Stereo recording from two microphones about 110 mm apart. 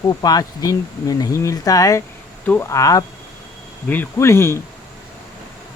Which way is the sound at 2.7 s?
30° left (ahead or behind).